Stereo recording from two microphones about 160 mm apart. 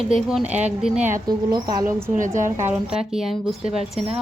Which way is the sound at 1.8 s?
50° right (ahead or behind).